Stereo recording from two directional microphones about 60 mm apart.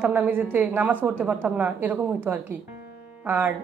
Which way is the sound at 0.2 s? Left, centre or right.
Right.